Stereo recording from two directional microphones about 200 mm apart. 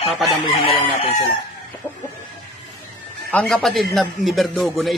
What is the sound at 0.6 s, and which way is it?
Chicken, 25° left (ahead or behind).